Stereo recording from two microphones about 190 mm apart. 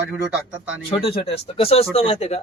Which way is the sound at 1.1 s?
30° left (ahead or behind).